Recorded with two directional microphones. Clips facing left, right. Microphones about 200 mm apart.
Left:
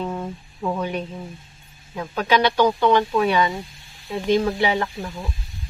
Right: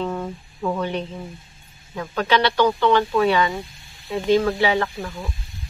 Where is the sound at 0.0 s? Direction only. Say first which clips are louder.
Right 1 dB; 10° left (ahead or behind).